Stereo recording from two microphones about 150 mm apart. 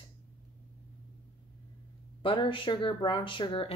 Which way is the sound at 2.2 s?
35° left (ahead or behind).